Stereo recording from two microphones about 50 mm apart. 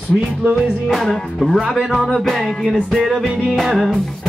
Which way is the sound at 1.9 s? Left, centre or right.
Centre.